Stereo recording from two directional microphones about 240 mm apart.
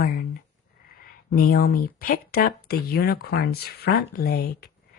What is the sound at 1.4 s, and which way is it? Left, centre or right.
Speech, left.